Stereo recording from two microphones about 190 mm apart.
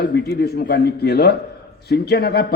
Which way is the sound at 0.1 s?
60° left (ahead or behind).